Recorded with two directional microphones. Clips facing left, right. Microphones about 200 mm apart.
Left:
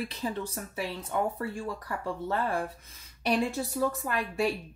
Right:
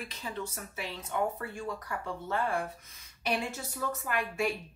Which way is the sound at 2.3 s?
35° left (ahead or behind).